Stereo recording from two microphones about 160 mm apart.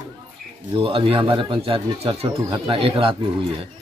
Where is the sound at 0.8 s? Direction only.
35° right (ahead or behind).